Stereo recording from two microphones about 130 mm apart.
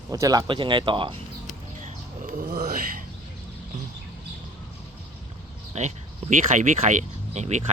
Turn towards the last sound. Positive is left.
turn(degrees=-60)  # may be behind; listen again after turning